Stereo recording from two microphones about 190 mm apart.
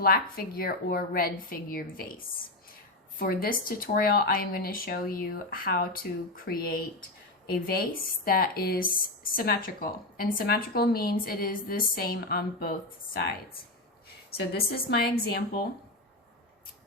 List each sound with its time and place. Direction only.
0.0 s a woman's voice: 55° left (ahead or behind)
14.5 s a woman's voice: 55° left (ahead or behind)